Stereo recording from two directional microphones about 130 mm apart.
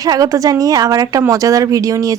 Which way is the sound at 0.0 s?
25° right (ahead or behind).